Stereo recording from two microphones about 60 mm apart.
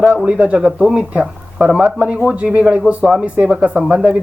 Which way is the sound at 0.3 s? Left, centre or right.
Right.